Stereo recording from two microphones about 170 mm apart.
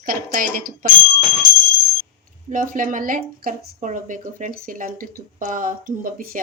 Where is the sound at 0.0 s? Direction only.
55° right (ahead or behind).